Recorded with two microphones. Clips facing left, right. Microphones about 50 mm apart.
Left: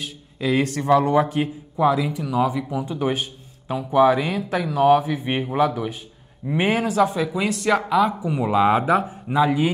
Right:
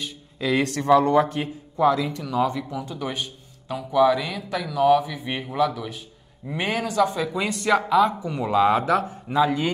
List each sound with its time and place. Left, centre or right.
0.0 s speech: centre
5.3 s a man's voice: left
6.5 s speech: centre